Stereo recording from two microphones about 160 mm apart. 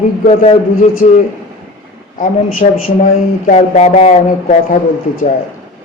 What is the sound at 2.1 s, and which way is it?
Speech, 60° left (ahead or behind).